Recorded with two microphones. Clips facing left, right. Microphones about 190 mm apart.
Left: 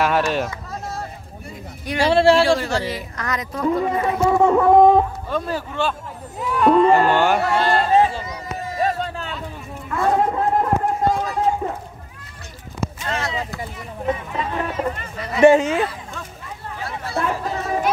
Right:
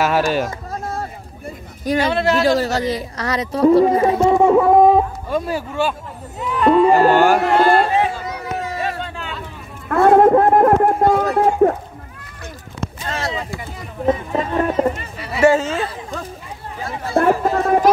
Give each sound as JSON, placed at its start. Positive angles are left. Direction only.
{"t": 0.0, "sound": "speech", "side_deg": -5}
{"t": 0.5, "sound": "a sound", "side_deg": -45}
{"t": 2.0, "sound": "speech", "side_deg": 30}
{"t": 2.4, "sound": "speech", "side_deg": -40}
{"t": 4.3, "sound": "speech", "side_deg": -15}
{"t": 6.4, "sound": "speech", "side_deg": 0}
{"t": 7.0, "sound": "speech", "side_deg": -45}
{"t": 7.3, "sound": "speech", "side_deg": -55}
{"t": 8.3, "sound": "a sound", "side_deg": -70}
{"t": 9.8, "sound": "speech", "side_deg": -60}
{"t": 13.0, "sound": "a sound", "side_deg": -35}
{"t": 14.0, "sound": "speech", "side_deg": -40}
{"t": 15.4, "sound": "speech", "side_deg": 20}
{"t": 16.8, "sound": "speech", "side_deg": -50}